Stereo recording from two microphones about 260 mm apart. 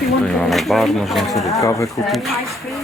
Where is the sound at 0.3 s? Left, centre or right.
Centre.